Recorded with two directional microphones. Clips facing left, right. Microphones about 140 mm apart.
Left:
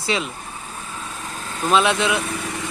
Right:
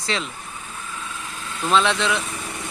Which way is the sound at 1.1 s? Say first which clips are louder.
Left 2 dB; 40° left (ahead or behind).